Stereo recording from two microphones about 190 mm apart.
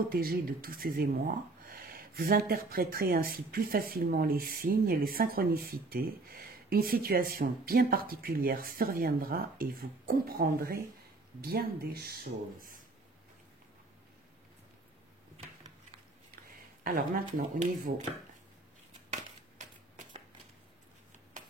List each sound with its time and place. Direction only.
0.1 s speech: 50° right (ahead or behind)
16.8 s speech: 45° right (ahead or behind)